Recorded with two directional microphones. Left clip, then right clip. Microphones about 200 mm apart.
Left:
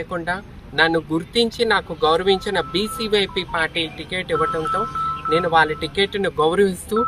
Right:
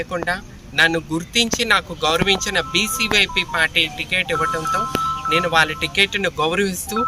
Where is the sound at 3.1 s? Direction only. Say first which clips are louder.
Right 2 dB; 5° left (ahead or behind).